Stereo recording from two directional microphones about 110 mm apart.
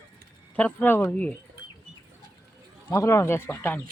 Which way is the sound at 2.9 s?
25° left (ahead or behind).